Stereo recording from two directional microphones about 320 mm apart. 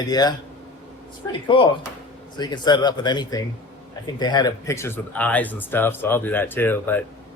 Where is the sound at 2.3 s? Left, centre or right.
Centre.